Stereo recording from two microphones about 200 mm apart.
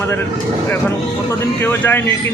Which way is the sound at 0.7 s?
10° left (ahead or behind).